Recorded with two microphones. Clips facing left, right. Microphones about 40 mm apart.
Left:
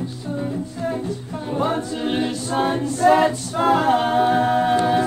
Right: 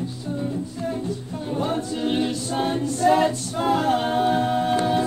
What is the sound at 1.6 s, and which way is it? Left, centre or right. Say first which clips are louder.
A capella: left 3 dB; centre.